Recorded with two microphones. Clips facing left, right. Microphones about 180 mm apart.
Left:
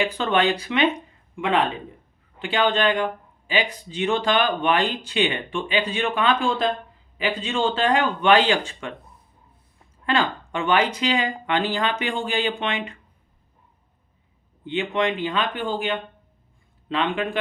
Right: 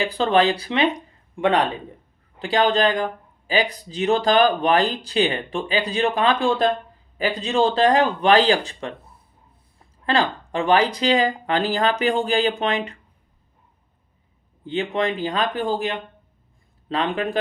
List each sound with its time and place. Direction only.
0.0 s speech: 35° right (ahead or behind)
10.1 s speech: 35° right (ahead or behind)
14.6 s speech: 40° right (ahead or behind)